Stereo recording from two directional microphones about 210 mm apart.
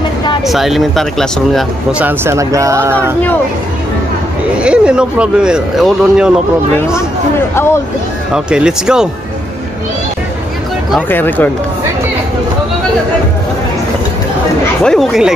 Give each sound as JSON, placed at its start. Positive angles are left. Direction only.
{"t": 0.5, "sound": "speech", "side_deg": 0}
{"t": 4.6, "sound": "speech", "side_deg": -5}
{"t": 8.3, "sound": "speech", "side_deg": -5}
{"t": 10.9, "sound": "speech", "side_deg": 10}
{"t": 14.8, "sound": "speech", "side_deg": 0}